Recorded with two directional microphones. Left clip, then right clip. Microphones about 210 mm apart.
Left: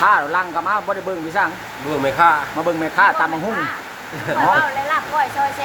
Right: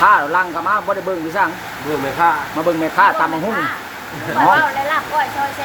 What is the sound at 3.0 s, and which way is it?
Speech, 5° right (ahead or behind).